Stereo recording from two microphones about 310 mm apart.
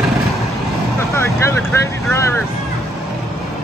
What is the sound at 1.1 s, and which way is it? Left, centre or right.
Vehicle, centre.